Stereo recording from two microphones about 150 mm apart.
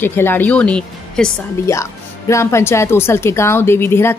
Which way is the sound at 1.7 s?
20° left (ahead or behind).